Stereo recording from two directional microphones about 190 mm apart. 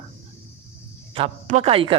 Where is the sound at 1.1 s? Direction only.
35° right (ahead or behind).